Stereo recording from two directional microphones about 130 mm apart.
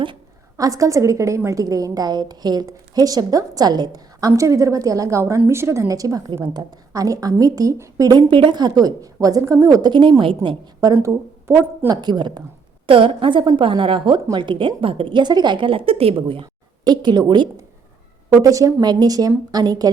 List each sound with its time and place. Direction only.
0.5 s a woman's voice: 25° right (ahead or behind)
10.8 s speech: 25° right (ahead or behind)
11.9 s a woman's voice: 35° right (ahead or behind)